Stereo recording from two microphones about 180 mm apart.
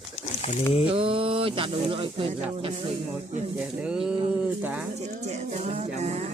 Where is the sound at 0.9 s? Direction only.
30° right (ahead or behind).